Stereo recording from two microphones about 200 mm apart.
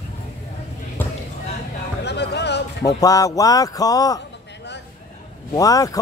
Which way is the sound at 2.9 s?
15° left (ahead or behind).